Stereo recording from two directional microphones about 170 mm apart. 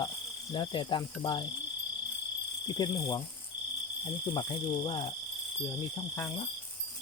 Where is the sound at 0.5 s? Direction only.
30° left (ahead or behind).